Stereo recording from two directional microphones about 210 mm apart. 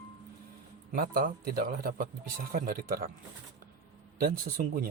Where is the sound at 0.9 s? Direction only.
45° right (ahead or behind).